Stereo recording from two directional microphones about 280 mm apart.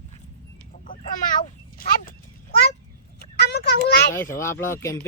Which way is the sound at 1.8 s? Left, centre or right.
Left.